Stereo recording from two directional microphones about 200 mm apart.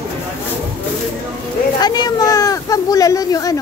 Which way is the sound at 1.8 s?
20° left (ahead or behind).